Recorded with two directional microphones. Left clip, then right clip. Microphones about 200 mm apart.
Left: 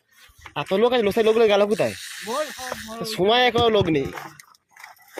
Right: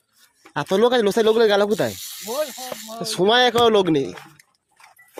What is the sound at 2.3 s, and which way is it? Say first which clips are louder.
Speech: right 1 dB; 55° left (ahead or behind).